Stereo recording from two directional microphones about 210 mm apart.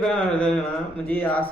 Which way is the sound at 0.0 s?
5° left (ahead or behind).